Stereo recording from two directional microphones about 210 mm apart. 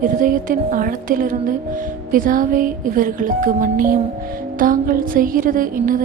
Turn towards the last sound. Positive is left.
turn(degrees=-40)  # may be behind; listen again after turning